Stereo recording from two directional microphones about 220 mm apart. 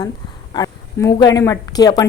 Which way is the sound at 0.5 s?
15° left (ahead or behind).